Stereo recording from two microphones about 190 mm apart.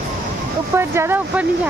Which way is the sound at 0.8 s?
10° right (ahead or behind).